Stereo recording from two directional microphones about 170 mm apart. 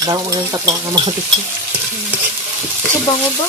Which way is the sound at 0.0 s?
20° right (ahead or behind).